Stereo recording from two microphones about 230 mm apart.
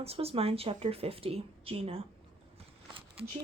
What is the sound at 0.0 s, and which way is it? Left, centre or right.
A woman's voice, right.